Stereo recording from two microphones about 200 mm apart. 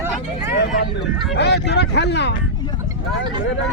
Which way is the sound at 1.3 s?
60° left (ahead or behind).